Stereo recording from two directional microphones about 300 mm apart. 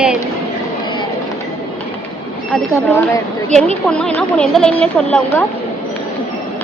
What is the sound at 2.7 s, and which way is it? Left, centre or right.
A woman's voice, centre.